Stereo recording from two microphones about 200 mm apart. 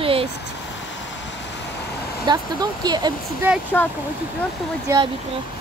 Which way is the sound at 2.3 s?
20° right (ahead or behind).